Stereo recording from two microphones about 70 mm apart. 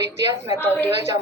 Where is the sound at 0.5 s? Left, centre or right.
Left.